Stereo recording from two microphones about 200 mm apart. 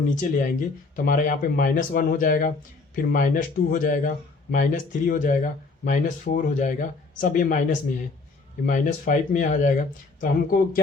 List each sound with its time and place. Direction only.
0.2 s speech: 40° left (ahead or behind)